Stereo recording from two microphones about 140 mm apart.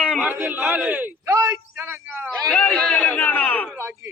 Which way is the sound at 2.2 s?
10° left (ahead or behind).